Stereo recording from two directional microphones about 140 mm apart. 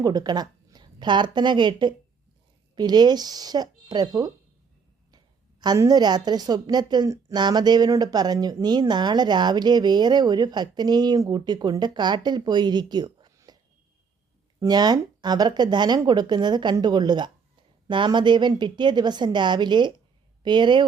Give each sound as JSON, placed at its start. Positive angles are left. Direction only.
{"t": 0.0, "sound": "a woman's voice", "side_deg": -30}
{"t": 14.6, "sound": "a woman's voice", "side_deg": -30}